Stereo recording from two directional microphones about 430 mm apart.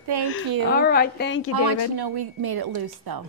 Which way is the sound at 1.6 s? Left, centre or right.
Right.